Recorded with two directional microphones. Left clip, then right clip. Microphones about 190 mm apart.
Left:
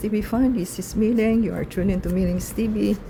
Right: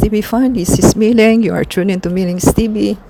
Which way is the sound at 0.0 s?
40° right (ahead or behind).